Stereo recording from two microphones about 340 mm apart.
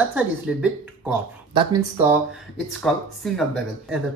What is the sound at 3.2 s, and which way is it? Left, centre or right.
Speech, centre.